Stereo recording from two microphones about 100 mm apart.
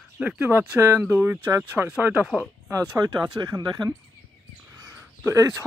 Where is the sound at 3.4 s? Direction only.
45° right (ahead or behind).